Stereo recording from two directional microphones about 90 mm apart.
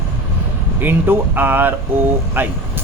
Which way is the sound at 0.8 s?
25° right (ahead or behind).